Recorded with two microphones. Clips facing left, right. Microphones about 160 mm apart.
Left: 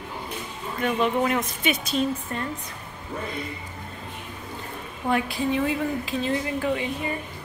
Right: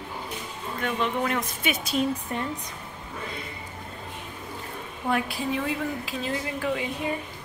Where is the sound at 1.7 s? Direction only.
10° right (ahead or behind).